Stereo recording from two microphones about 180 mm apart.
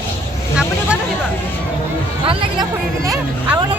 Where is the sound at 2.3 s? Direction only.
20° right (ahead or behind).